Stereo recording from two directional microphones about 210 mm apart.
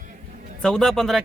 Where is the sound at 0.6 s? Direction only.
Centre (ahead or behind).